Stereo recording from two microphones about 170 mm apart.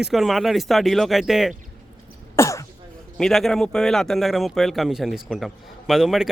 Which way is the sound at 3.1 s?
Centre (ahead or behind).